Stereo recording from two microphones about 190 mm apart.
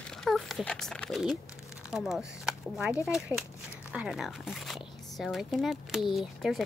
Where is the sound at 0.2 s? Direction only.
Centre (ahead or behind).